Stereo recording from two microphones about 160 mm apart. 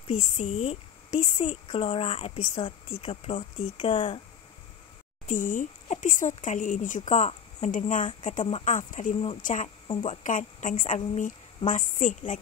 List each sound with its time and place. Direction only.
0.0 s a woman's voice: 40° left (ahead or behind)
1.4 s speech: 35° left (ahead or behind)
5.2 s a woman's voice: 55° left (ahead or behind)